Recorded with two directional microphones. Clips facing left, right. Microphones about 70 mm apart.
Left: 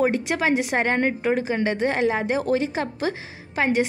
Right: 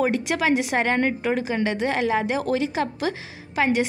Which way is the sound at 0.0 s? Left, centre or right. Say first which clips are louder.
Even; left.